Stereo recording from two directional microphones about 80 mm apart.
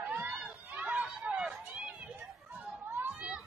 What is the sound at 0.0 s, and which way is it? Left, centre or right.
Run, right.